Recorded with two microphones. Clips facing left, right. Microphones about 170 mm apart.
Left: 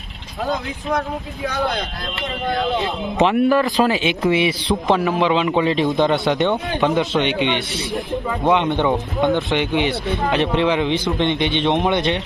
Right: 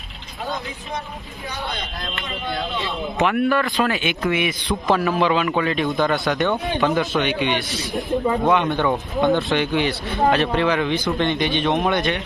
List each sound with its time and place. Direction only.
3.2 s a man's voice: 25° left (ahead or behind)